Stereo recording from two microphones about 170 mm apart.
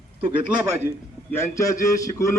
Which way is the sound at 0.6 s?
15° right (ahead or behind).